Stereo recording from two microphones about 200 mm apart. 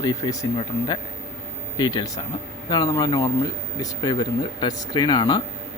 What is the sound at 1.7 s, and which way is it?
Speech, 20° left (ahead or behind).